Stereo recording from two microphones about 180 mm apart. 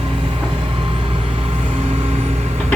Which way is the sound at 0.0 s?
30° right (ahead or behind).